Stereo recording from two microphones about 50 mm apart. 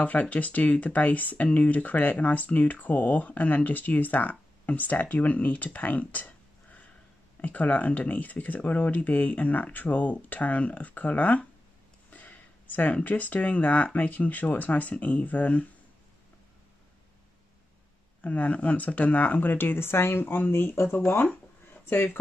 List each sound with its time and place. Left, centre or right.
0.0 s speech: left
18.2 s speech: left
19.5 s speech: left